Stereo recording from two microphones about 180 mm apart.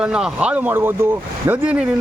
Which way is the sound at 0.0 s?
5° right (ahead or behind).